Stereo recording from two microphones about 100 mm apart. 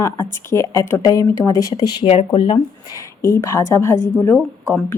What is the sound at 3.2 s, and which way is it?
Speech, 30° left (ahead or behind).